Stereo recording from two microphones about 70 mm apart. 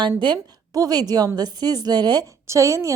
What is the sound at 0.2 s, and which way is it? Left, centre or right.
A woman's voice, right.